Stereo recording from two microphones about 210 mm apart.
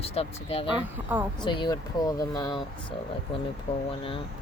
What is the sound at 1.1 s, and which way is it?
Speech, 10° right (ahead or behind).